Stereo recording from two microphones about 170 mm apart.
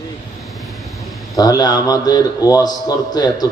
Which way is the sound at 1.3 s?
20° left (ahead or behind).